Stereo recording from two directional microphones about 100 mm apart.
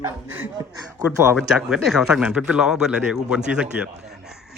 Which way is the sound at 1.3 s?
5° right (ahead or behind).